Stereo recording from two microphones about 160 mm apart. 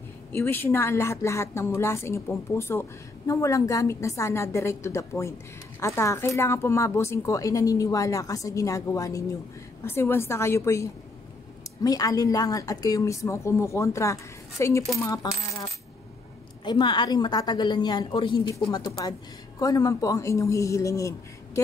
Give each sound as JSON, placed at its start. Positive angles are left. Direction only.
{"t": 0.3, "sound": "a woman's voice", "side_deg": 15}
{"t": 16.6, "sound": "speech", "side_deg": 30}